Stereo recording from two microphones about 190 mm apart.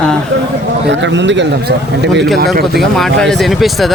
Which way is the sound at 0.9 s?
70° right (ahead or behind).